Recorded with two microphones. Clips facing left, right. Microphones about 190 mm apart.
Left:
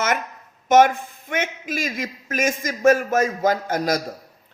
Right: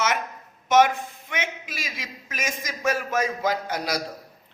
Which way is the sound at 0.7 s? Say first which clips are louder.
Left 4 dB; 50° left (ahead or behind).